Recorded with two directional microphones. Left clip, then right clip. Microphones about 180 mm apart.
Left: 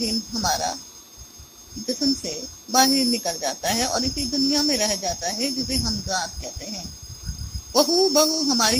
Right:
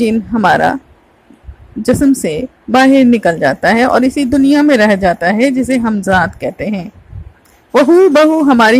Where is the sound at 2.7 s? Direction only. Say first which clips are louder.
Right 11 dB; 45° right (ahead or behind).